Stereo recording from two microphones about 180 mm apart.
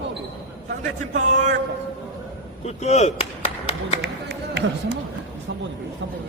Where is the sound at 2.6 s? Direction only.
40° left (ahead or behind).